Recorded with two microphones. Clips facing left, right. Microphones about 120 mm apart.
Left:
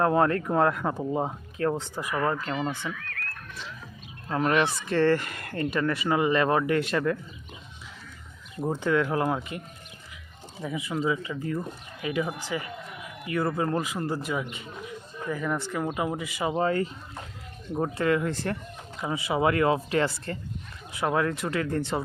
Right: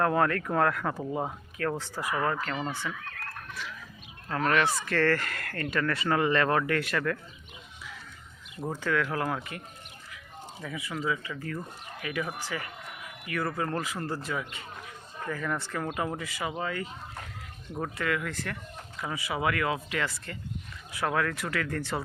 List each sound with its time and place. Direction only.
0.0 s speech: 25° left (ahead or behind)
4.3 s speech: 20° left (ahead or behind)
8.6 s speech: 20° left (ahead or behind)
10.6 s speech: 20° left (ahead or behind)
16.5 s speech: 35° left (ahead or behind)
20.9 s speech: 20° left (ahead or behind)